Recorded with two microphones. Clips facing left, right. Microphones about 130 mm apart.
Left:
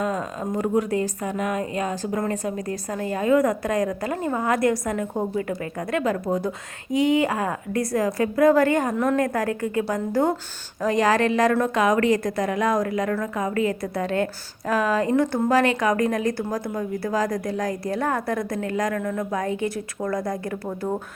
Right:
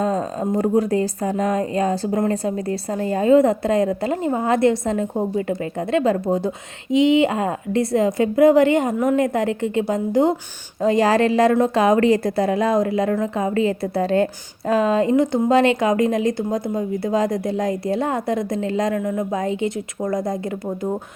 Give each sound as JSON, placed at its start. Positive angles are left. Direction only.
{"t": 0.0, "sound": "a woman's voice", "side_deg": -30}